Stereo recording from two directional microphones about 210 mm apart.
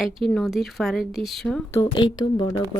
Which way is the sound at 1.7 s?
20° left (ahead or behind).